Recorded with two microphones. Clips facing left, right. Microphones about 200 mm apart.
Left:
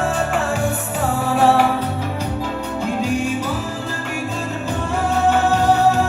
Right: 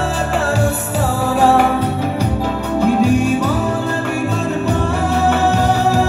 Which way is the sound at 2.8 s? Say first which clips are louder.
Right 8 dB; 70° right (ahead or behind).